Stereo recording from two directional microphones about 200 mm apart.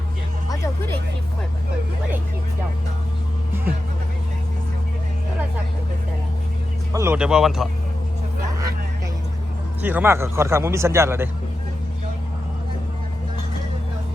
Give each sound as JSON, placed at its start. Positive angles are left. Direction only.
{"t": 6.9, "sound": "speech", "side_deg": -10}
{"t": 9.8, "sound": "speech", "side_deg": -10}